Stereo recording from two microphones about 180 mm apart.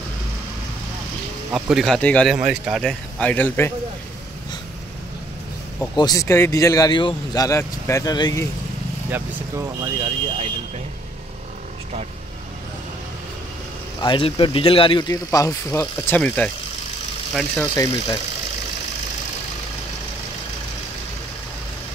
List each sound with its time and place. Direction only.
1.5 s speech: 5° right (ahead or behind)
2.3 s speech: 5° right (ahead or behind); by 3.7 s 10° left (ahead or behind)
5.8 s speech: 20° left (ahead or behind)
9.1 s speech: 15° right (ahead or behind)
14.0 s speech: 30° left (ahead or behind); by 16.4 s 10° left (ahead or behind)
17.6 s speech: 15° left (ahead or behind)